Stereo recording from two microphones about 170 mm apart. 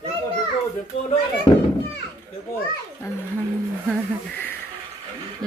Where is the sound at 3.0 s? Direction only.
15° left (ahead or behind).